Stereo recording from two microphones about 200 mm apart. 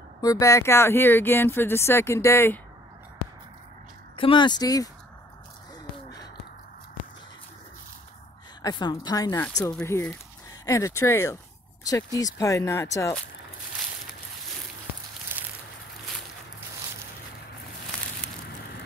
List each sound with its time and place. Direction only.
0.2 s speech: 15° left (ahead or behind)
4.2 s a woman's voice: 25° left (ahead or behind)
8.6 s a woman's voice: 20° left (ahead or behind)
15.3 s a sound: 10° right (ahead or behind)